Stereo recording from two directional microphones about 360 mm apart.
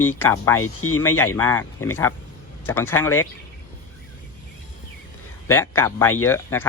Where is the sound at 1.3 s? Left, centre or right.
Centre.